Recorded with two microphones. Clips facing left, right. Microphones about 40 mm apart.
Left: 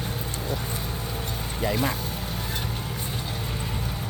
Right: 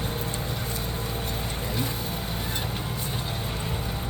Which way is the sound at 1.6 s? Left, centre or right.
Left.